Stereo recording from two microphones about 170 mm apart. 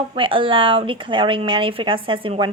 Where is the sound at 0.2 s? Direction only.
30° right (ahead or behind).